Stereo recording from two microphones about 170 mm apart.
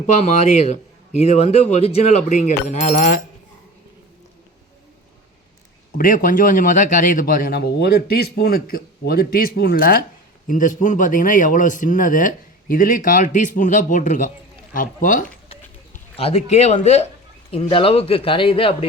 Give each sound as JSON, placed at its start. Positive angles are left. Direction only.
{"t": 0.4, "sound": "a man's voice", "side_deg": 40}
{"t": 6.0, "sound": "a man's voice", "side_deg": 55}
{"t": 10.4, "sound": "a man's voice", "side_deg": 50}
{"t": 16.1, "sound": "speech", "side_deg": 35}